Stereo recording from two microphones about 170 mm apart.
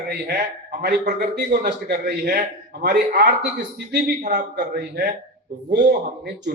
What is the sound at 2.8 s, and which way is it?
Speech, 85° right.